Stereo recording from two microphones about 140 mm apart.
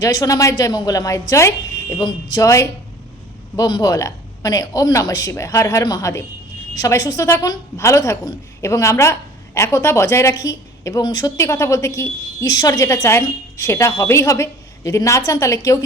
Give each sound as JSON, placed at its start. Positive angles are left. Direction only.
{"t": 0.0, "sound": "a woman's voice", "side_deg": 25}